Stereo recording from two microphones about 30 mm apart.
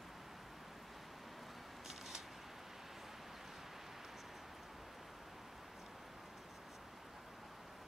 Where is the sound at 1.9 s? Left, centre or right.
Centre.